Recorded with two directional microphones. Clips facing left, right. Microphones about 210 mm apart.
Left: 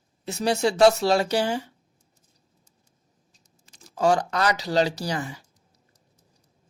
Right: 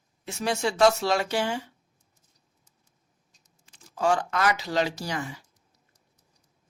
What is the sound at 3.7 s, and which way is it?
Speech, 40° left (ahead or behind).